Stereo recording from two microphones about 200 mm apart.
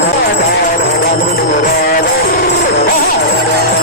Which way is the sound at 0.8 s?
55° left (ahead or behind).